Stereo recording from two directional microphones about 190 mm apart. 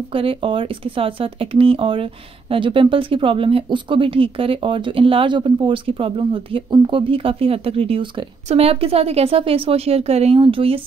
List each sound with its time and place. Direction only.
0.1 s speech: 30° right (ahead or behind)